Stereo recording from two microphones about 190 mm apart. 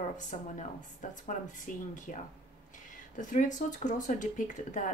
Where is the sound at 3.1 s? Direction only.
40° left (ahead or behind).